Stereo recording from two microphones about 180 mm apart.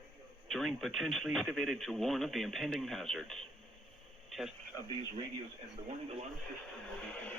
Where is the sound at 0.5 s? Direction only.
Centre (ahead or behind).